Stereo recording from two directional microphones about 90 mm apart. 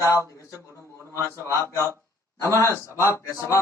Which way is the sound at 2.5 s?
35° left (ahead or behind).